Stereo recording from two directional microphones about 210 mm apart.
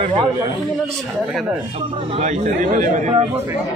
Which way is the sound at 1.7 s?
30° right (ahead or behind).